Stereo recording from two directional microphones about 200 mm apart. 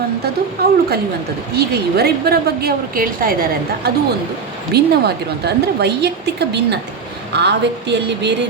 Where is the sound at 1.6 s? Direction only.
55° right (ahead or behind).